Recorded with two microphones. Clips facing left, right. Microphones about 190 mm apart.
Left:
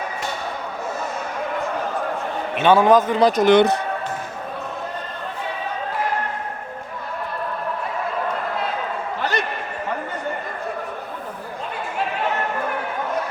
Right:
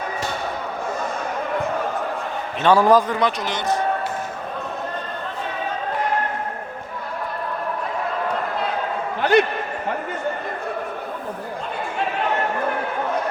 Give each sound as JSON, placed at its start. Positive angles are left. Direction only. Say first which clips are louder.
{"t": 2.6, "sound": "a man's voice", "louder": "left 1 dB", "side_deg": 0}
{"t": 2.9, "sound": "speech", "louder": "left 2 dB", "side_deg": 25}
{"t": 3.2, "sound": "a man's voice", "louder": "left 9 dB", "side_deg": 50}